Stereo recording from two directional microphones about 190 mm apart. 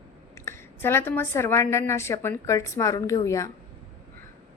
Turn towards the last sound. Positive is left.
turn(degrees=15)  # may be behind; listen again after turning